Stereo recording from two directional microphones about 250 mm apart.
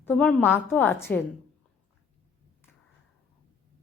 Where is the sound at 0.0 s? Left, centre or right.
Centre.